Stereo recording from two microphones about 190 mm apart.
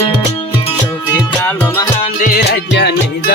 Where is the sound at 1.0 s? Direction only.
10° left (ahead or behind).